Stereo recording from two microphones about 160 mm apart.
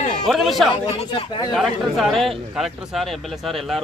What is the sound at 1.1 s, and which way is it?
Speech, 30° left (ahead or behind).